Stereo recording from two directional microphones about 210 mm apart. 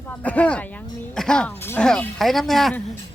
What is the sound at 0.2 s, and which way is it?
Speech, 5° left (ahead or behind).